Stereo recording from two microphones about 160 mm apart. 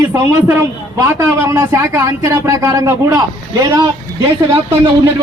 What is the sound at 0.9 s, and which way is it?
Speech, 20° right (ahead or behind).